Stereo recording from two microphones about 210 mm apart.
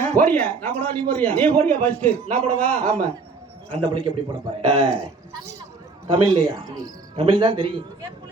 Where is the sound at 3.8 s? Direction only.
25° right (ahead or behind).